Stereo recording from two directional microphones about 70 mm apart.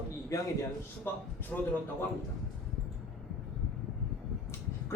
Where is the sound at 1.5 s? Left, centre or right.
Left.